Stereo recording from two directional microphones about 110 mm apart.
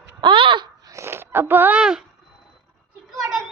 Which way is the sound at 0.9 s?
25° right (ahead or behind).